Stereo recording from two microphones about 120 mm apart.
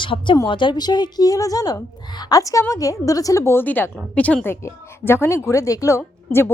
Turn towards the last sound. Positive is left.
turn(degrees=20)  # may be behind; listen again after turning